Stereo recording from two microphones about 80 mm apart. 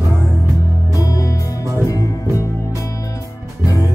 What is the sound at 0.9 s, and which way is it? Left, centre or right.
Music, left.